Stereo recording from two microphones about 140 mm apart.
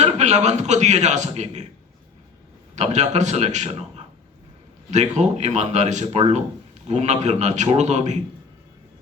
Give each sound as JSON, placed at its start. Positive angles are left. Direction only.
{"t": 0.0, "sound": "a man's voice", "side_deg": -55}
{"t": 2.7, "sound": "a man's voice", "side_deg": -55}